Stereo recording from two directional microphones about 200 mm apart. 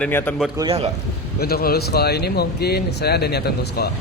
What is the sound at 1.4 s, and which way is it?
Speech, 50° left (ahead or behind).